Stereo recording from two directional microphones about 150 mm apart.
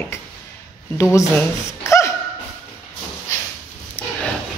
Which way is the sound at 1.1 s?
20° left (ahead or behind).